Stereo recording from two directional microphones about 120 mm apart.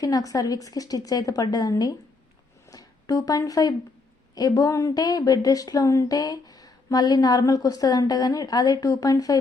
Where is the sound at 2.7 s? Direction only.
30° left (ahead or behind).